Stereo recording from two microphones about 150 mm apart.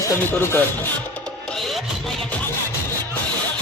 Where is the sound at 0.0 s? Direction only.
15° left (ahead or behind).